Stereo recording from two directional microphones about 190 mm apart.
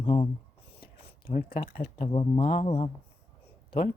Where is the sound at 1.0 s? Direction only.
30° left (ahead or behind).